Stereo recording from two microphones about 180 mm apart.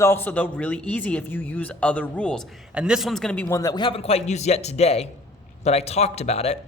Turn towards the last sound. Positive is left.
turn(degrees=35)  # may be behind; listen again after turning